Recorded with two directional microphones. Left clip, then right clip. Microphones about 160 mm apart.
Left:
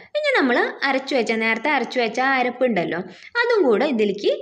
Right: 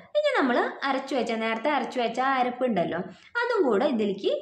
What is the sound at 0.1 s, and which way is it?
A woman's voice, 20° left (ahead or behind).